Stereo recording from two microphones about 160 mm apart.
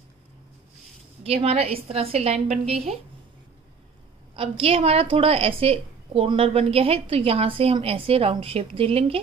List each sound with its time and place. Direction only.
1.2 s a woman's voice: 40° right (ahead or behind)
4.4 s a woman's voice: 35° right (ahead or behind)